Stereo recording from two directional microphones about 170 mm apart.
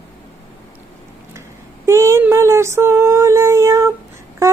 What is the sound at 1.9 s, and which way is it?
Child singing, 15° right (ahead or behind).